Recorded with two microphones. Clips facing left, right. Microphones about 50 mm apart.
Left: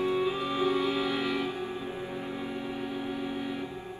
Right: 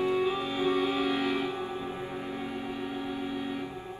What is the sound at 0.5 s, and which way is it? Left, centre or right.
Music, right.